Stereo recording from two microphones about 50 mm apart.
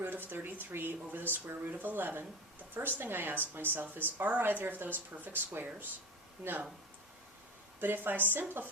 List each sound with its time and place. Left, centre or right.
0.0 s speech: right
7.8 s speech: right